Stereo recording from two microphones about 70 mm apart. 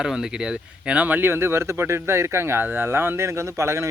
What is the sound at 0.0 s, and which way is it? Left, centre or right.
Speech, centre.